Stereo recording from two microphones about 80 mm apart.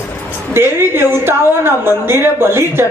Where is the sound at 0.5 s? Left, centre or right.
Right.